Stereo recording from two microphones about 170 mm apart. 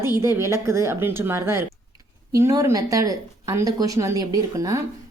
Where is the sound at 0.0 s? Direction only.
15° right (ahead or behind).